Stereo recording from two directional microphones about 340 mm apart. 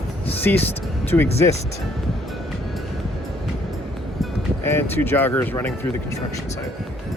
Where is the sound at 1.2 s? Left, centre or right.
Centre.